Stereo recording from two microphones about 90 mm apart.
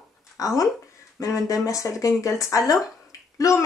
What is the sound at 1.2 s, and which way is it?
Speech, 40° left (ahead or behind).